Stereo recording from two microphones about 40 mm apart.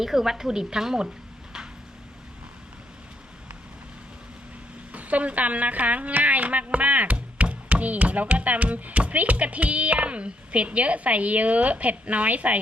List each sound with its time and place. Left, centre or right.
0.0 s a woman's voice: centre
4.9 s speech: right